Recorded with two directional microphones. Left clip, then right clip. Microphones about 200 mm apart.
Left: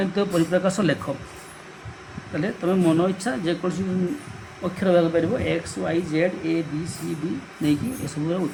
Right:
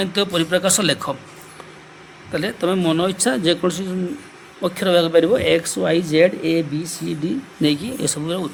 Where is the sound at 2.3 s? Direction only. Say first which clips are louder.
Right 4 dB; 60° right (ahead or behind).